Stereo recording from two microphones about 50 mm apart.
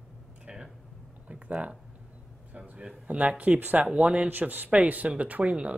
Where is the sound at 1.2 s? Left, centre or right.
Right.